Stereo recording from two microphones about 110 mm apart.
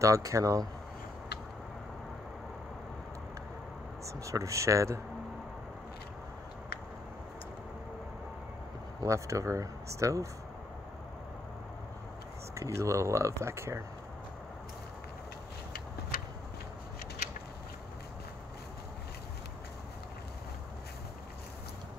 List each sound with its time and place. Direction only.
0.0 s speech: 30° right (ahead or behind)
4.0 s speech: 30° right (ahead or behind)
9.0 s speech: 30° right (ahead or behind)
12.5 s speech: 30° right (ahead or behind)